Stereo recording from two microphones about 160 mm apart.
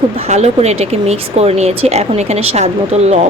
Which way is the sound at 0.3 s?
45° right (ahead or behind).